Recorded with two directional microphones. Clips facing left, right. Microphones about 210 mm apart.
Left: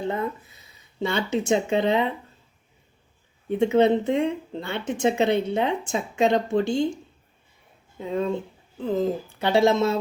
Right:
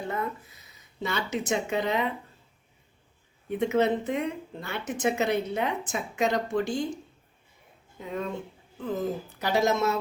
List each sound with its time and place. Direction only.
0.0 s speech: 25° left (ahead or behind)
3.5 s speech: 30° left (ahead or behind)
7.9 s speech: 30° left (ahead or behind)